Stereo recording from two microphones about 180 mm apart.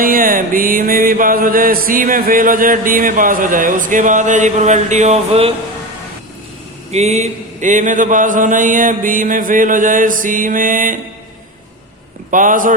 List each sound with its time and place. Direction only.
0.0 s mantra: 50° right (ahead or behind); by 5.5 s 35° right (ahead or behind)
6.9 s mantra: 40° right (ahead or behind)
12.3 s mantra: 45° right (ahead or behind)